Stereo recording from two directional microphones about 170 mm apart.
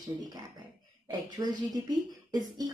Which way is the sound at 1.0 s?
25° right (ahead or behind).